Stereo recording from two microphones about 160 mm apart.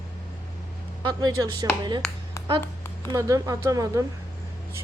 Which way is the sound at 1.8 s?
25° right (ahead or behind).